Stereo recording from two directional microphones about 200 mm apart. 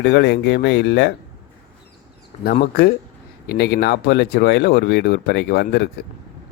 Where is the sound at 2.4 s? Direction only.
45° left (ahead or behind).